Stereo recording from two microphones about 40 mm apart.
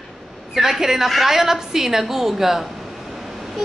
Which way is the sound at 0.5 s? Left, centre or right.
Centre.